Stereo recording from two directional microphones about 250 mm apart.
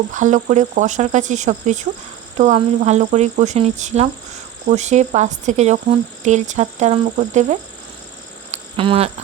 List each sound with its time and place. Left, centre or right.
0.1 s speech: right
8.4 s cricket: right